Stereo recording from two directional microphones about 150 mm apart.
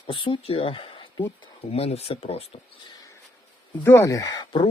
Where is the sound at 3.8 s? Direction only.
15° left (ahead or behind).